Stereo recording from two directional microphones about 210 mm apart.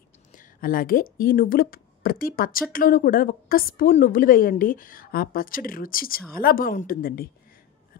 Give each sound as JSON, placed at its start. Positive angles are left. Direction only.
{"t": 0.3, "sound": "a woman's voice", "side_deg": 40}